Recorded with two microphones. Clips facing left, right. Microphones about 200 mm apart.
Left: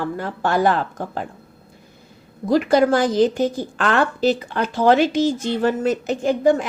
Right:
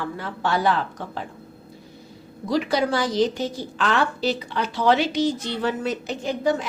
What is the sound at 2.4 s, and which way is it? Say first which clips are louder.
A woman's voice: left 6 dB; 50° left (ahead or behind).